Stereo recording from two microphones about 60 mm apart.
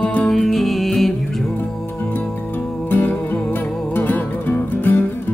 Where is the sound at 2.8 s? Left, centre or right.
Left.